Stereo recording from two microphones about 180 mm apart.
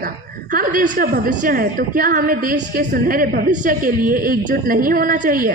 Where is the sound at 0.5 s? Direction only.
50° right (ahead or behind).